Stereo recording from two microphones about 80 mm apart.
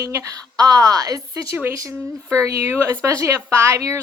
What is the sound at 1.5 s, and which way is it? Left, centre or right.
Speech, right.